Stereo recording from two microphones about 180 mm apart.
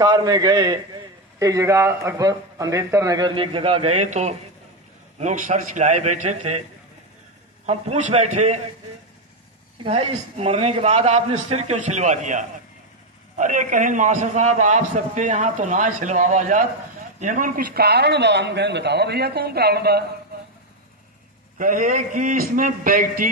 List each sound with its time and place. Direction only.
0.0 s a man's voice: 20° right (ahead or behind); by 6.6 s 40° right (ahead or behind)
7.6 s a man's voice: 35° right (ahead or behind)
9.8 s a man's voice: 35° right (ahead or behind); by 20.1 s 60° right (ahead or behind)
21.5 s a man's voice: 50° right (ahead or behind)